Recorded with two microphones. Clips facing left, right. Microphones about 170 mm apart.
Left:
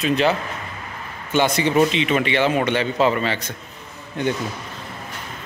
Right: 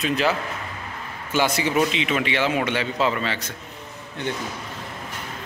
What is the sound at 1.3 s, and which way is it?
A man's voice, 5° right (ahead or behind).